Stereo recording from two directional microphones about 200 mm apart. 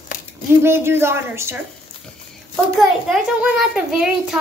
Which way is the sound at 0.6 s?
10° right (ahead or behind).